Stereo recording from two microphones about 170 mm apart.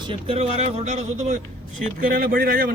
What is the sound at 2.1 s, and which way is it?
Speech, 55° right (ahead or behind).